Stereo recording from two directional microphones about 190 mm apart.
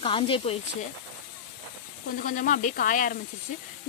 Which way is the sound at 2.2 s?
45° left (ahead or behind).